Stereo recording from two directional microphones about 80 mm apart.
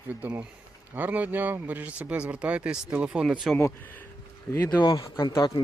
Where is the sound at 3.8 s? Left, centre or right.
Left.